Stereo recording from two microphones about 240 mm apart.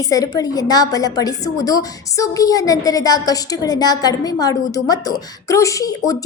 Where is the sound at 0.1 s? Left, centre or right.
Centre.